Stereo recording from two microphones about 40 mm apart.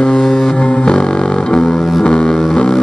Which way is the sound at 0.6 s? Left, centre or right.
Left.